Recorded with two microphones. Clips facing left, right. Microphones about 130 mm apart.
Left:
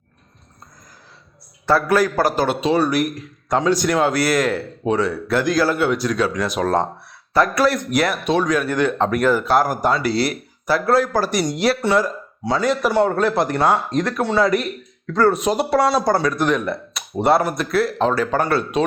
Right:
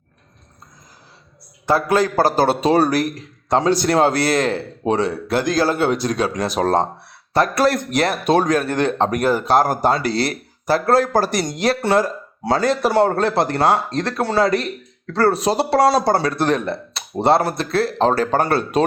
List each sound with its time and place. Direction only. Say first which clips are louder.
1.6 s speech: even; 20° right (ahead or behind)
7.9 s speech: even; 30° right (ahead or behind)
8.2 s speech: right 2 dB; 40° right (ahead or behind)
9.4 s speech: right 1 dB; 20° right (ahead or behind)
11.6 s speech: right 2 dB; 50° right (ahead or behind)
12.6 s speech: right 1 dB; 35° right (ahead or behind)